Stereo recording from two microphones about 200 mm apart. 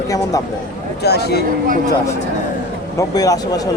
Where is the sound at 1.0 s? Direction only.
55° left (ahead or behind).